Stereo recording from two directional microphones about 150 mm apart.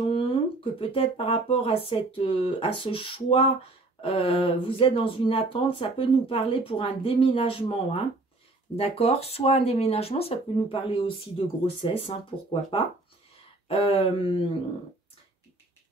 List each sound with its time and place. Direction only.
0.0 s speech: 35° left (ahead or behind)
13.7 s speech: 40° left (ahead or behind)